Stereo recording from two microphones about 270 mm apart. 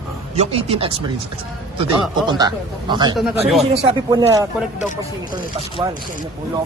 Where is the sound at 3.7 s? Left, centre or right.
Centre.